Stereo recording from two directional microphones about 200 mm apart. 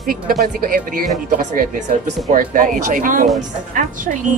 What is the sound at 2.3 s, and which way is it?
Speech, 40° right (ahead or behind).